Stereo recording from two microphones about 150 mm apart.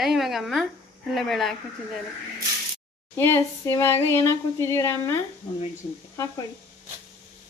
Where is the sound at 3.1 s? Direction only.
15° left (ahead or behind).